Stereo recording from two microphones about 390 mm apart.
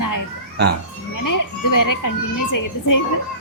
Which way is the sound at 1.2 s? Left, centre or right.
Left.